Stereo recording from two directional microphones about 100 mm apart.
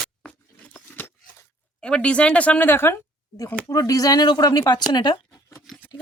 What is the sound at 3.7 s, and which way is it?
Speech, 35° left (ahead or behind).